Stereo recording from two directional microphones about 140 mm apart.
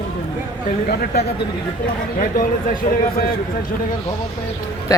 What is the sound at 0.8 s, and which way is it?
Speech, 90° left.